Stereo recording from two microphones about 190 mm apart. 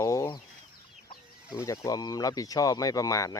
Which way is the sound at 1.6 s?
15° left (ahead or behind).